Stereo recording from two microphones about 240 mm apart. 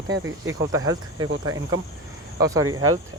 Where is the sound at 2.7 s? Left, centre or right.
Right.